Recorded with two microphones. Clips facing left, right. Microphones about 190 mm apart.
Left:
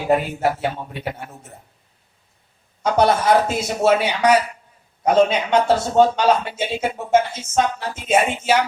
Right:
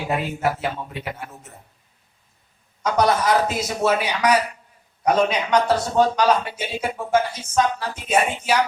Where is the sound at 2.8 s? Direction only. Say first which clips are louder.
Left 2 dB; 30° left (ahead or behind).